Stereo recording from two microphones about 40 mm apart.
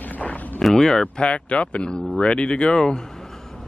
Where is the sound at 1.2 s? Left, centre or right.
Left.